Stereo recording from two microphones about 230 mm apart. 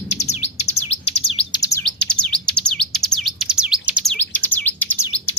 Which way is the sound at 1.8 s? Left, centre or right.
Centre.